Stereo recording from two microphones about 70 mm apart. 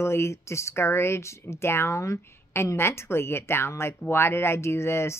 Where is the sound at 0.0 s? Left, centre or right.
Left.